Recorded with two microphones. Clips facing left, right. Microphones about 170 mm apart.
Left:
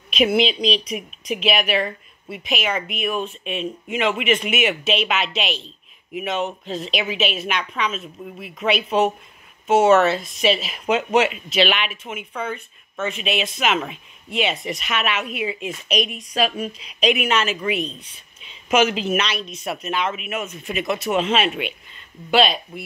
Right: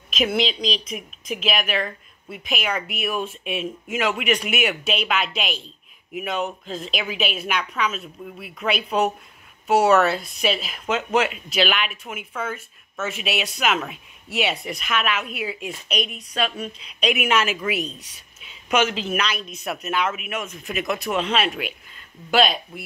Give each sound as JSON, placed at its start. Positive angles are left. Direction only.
{"t": 0.2, "sound": "a woman's voice", "side_deg": 5}
{"t": 17.1, "sound": "speech", "side_deg": -10}
{"t": 18.4, "sound": "a sound", "side_deg": -5}
{"t": 18.8, "sound": "a woman's voice", "side_deg": 10}
{"t": 19.6, "sound": "speech", "side_deg": 0}